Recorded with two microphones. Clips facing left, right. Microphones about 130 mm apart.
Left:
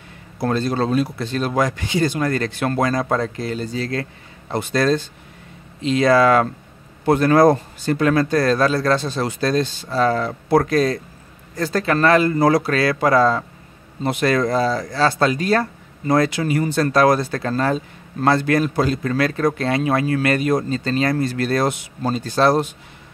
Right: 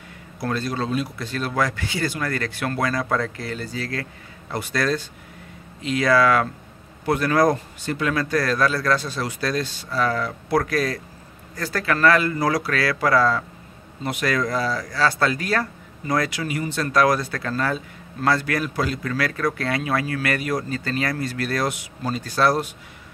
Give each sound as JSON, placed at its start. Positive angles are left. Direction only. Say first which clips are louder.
{"t": 0.4, "sound": "a man's voice", "louder": "left 5 dB", "side_deg": 25}
{"t": 0.8, "sound": "a man's voice", "louder": "left 6 dB", "side_deg": 40}
{"t": 1.2, "sound": "a man's voice", "louder": "left 4 dB", "side_deg": 25}
{"t": 7.9, "sound": "a man's voice", "louder": "left 7 dB", "side_deg": 40}
{"t": 8.2, "sound": "a man's voice", "louder": "left 4 dB", "side_deg": 25}
{"t": 16.9, "sound": "a man's voice", "louder": "left 2 dB", "side_deg": 30}